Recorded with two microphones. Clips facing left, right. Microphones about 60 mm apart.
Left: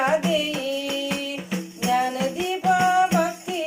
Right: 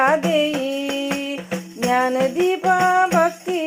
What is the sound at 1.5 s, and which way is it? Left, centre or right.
Music, right.